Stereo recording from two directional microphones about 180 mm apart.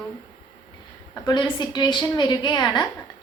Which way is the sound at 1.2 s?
25° left (ahead or behind).